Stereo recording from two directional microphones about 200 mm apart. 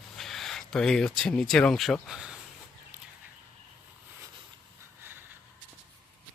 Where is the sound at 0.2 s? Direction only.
Centre (ahead or behind).